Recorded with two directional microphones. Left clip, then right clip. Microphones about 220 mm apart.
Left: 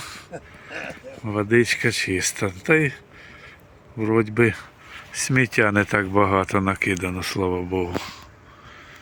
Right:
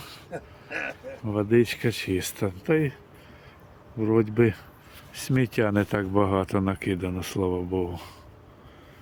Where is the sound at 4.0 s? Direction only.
5° right (ahead or behind).